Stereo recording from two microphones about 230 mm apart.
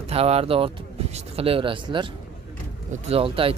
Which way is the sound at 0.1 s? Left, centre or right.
Right.